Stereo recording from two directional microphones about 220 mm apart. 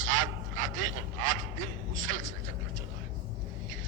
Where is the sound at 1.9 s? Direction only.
65° right (ahead or behind).